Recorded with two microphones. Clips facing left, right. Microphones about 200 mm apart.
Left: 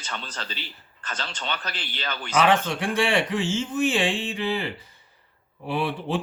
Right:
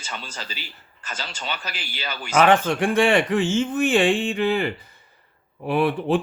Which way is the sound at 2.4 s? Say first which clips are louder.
Right 4 dB; 50° right (ahead or behind).